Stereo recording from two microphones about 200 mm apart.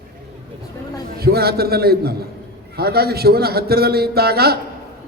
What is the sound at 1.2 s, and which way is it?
A man's voice, 50° right (ahead or behind).